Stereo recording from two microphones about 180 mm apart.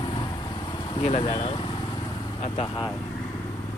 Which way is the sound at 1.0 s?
30° left (ahead or behind).